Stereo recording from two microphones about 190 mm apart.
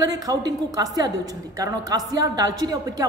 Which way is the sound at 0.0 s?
20° right (ahead or behind).